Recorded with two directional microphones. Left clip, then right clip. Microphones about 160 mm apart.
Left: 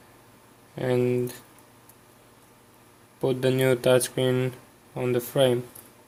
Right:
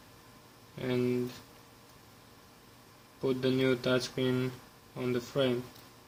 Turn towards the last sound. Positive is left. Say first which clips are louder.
# left 8 dB
turn(degrees=50)  # may be behind; listen again after turning